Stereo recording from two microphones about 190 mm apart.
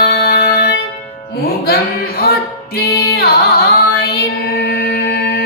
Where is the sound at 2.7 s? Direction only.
55° left (ahead or behind).